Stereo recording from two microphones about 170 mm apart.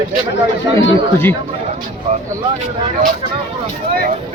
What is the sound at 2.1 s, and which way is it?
Speech, 45° right (ahead or behind).